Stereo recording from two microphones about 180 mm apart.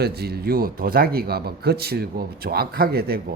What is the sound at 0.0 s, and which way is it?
A man's voice, 60° right (ahead or behind).